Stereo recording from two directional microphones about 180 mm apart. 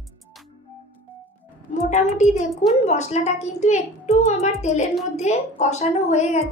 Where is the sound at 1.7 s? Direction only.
40° left (ahead or behind).